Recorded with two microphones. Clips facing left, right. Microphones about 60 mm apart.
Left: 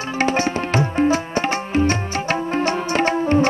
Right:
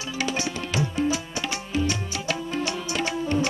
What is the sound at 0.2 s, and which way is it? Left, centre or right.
Tabla, left.